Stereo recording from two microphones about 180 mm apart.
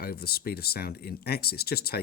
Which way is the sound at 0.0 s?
60° left (ahead or behind).